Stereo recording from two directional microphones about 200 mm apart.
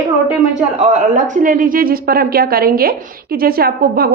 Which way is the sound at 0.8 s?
35° right (ahead or behind).